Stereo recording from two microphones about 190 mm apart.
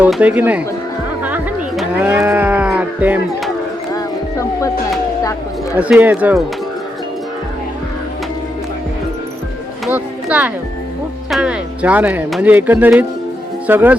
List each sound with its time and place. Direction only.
0.0 s speech: 5° right (ahead or behind)
1.2 s music: 5° right (ahead or behind)
2.0 s speech: 10° right (ahead or behind)
3.9 s music: 15° left (ahead or behind)
5.7 s speech: 10° right (ahead or behind)
9.8 s speech: 5° right (ahead or behind)